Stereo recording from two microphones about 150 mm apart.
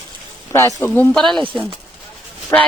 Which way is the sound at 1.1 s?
Centre (ahead or behind).